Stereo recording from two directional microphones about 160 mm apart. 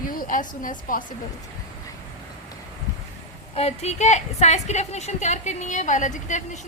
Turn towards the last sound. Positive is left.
turn(degrees=50)  # may be behind; listen again after turning